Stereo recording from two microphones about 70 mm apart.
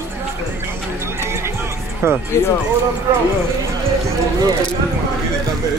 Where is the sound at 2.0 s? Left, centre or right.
Right.